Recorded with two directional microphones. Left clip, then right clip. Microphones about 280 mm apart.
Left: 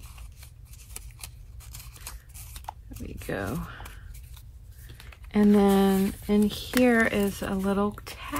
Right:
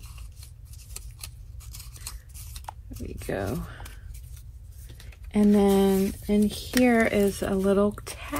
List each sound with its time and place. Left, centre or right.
2.0 s scissors: centre
2.9 s speech: centre